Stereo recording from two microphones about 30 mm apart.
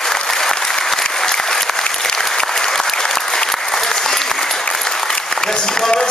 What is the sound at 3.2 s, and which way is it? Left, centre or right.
Applause, left.